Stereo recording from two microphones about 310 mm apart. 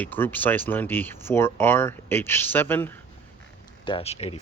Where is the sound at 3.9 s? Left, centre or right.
Centre.